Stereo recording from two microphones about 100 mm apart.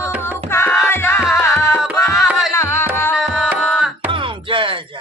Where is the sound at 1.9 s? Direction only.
10° right (ahead or behind).